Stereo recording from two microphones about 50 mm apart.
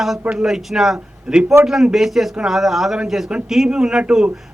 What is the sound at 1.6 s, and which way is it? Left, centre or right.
Speech, right.